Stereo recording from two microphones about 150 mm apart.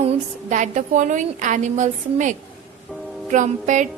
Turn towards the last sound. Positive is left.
turn(degrees=-55)  # may be behind; listen again after turning